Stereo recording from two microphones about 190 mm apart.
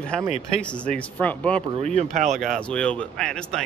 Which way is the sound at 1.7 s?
35° right (ahead or behind).